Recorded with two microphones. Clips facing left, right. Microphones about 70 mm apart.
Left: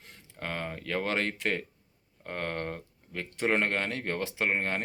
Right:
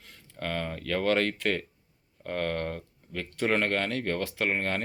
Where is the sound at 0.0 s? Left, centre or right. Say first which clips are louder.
Right 3 dB; left.